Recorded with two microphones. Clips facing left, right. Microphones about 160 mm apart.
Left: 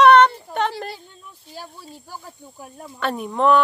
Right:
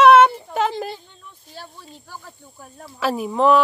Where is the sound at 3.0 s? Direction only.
5° right (ahead or behind).